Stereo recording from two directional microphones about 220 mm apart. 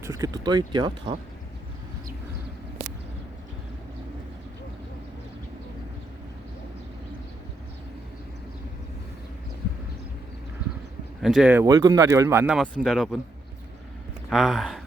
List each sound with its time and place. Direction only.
0.0 s speech: 15° right (ahead or behind)
11.2 s speech: centre (ahead or behind)
14.3 s speech: centre (ahead or behind)